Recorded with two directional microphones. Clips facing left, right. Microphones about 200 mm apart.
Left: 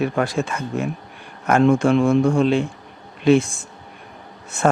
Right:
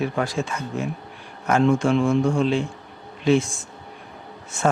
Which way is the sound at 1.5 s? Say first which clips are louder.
Left 3 dB; 55° left (ahead or behind).